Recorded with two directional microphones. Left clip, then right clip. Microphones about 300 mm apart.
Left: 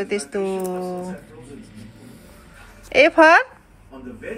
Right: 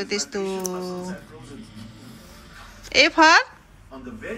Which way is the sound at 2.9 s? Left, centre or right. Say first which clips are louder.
Left 3 dB; centre.